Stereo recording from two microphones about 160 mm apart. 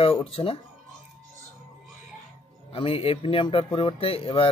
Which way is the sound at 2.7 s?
35° left (ahead or behind).